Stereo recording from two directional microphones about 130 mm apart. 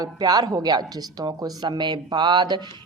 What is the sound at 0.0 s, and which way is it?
A woman's voice, 30° right (ahead or behind).